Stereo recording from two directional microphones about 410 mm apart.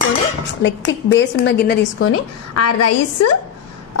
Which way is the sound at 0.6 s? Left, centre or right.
Left.